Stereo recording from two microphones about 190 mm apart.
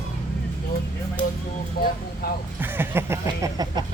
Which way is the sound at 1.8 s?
50° left (ahead or behind).